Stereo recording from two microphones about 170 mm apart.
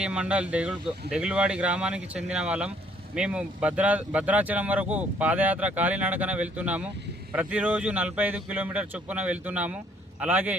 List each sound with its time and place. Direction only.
0.0 s speech: 5° right (ahead or behind)